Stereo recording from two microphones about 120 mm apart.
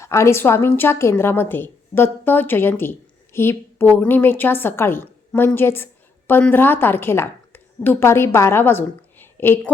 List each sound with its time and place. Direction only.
0.0 s a woman's voice: 25° left (ahead or behind)
5.5 s a sound: 20° left (ahead or behind)
6.5 s a woman's voice: 15° left (ahead or behind)